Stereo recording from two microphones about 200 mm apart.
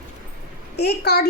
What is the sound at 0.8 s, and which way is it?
Speech, 55° left (ahead or behind).